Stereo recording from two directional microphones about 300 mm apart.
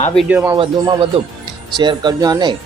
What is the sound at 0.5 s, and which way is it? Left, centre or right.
Speech, centre.